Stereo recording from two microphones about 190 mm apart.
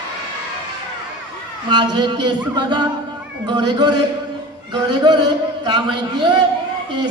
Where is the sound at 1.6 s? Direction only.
25° right (ahead or behind).